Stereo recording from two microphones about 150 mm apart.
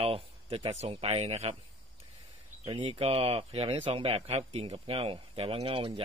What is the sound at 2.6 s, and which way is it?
Speech, 35° right (ahead or behind).